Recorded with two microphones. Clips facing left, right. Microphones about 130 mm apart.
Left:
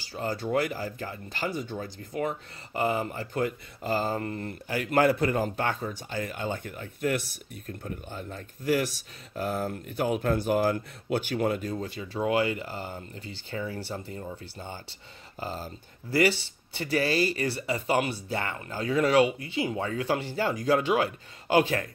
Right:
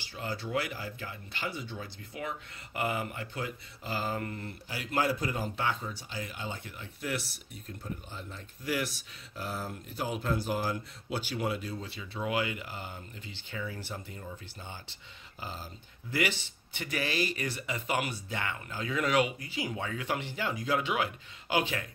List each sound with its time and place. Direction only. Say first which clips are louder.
0.0 s speech: left 6 dB; 40° left (ahead or behind)
3.3 s speech: left 13 dB; 45° left (ahead or behind)